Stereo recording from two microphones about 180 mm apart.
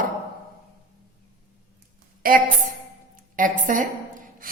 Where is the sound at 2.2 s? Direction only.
50° right (ahead or behind).